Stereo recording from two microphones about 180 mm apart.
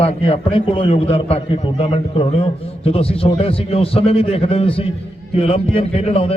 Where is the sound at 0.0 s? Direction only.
35° left (ahead or behind).